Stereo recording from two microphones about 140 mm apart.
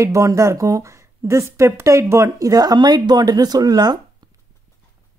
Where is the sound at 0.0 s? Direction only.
20° right (ahead or behind).